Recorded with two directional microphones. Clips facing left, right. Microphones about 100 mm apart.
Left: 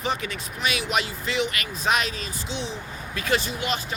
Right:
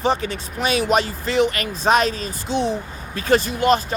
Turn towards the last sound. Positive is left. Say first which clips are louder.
# right 11 dB
turn(degrees=-40)  # may be behind; listen again after turning